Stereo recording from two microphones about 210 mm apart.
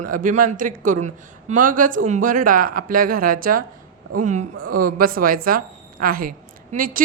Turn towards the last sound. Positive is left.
turn(degrees=-40)  # may be behind; listen again after turning